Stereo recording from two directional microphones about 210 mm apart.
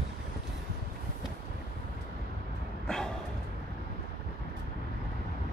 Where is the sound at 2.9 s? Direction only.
5° left (ahead or behind).